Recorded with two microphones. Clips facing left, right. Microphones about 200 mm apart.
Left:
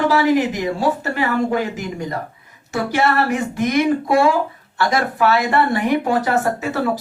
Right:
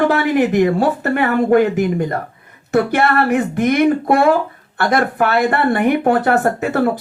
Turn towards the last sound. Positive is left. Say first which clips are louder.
# right 4 dB
turn(degrees=-55)  # may be behind; listen again after turning